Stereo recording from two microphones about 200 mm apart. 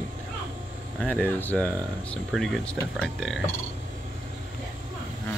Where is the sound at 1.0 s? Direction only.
10° left (ahead or behind).